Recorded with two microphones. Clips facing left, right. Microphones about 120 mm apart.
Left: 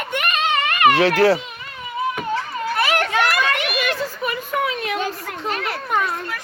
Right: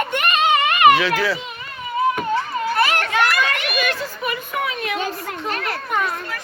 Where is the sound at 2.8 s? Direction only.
10° left (ahead or behind).